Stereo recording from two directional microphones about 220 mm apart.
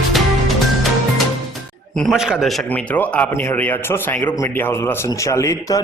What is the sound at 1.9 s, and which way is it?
A man's voice, centre (ahead or behind).